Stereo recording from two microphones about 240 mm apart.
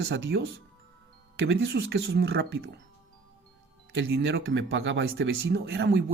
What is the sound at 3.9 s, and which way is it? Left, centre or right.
Speech, right.